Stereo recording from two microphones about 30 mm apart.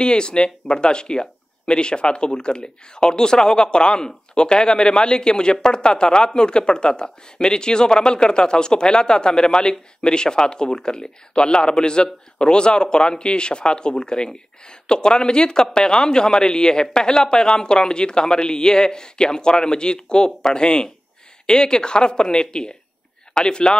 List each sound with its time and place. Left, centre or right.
0.0 s speech: left